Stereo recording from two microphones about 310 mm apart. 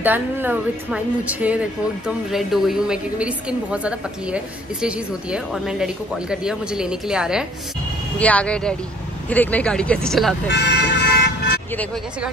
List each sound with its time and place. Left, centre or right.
0.0 s speech: centre
10.5 s speech: left
11.7 s speech: centre